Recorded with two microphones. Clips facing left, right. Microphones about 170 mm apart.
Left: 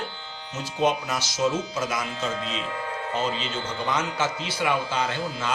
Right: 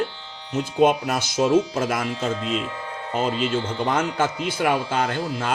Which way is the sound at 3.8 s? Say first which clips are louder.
Right 2 dB; 55° right (ahead or behind).